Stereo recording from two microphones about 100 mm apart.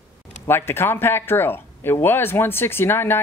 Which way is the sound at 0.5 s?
25° left (ahead or behind).